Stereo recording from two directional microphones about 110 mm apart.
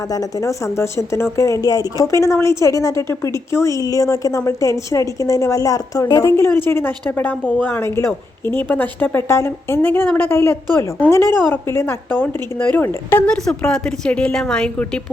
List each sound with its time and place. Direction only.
0.1 s a woman's voice: 30° left (ahead or behind); by 15.0 s 10° left (ahead or behind)